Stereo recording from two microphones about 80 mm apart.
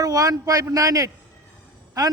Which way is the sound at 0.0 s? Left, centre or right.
Right.